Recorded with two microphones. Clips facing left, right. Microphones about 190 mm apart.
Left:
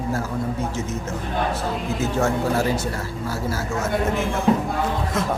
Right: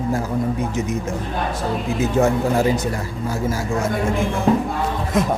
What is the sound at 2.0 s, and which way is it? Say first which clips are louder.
Speech: right 5 dB; 15° right (ahead or behind).